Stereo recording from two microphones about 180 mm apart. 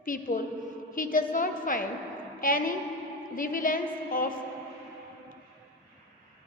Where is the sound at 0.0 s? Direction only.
50° left (ahead or behind).